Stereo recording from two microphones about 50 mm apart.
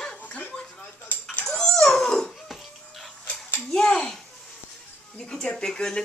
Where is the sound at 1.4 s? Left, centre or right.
Centre.